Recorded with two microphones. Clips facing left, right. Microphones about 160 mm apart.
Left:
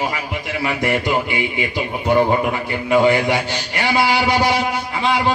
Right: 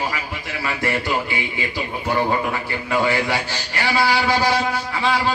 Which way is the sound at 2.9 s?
20° left (ahead or behind).